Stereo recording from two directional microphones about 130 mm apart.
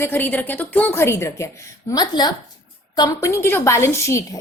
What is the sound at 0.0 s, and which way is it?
A woman's voice, 15° left (ahead or behind).